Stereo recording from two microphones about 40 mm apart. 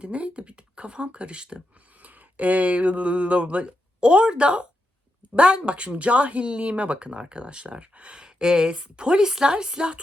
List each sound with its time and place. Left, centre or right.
0.0 s speech: right
2.0 s speech: right